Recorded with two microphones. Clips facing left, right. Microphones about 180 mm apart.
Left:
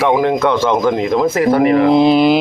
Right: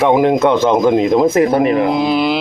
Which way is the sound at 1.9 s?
20° left (ahead or behind).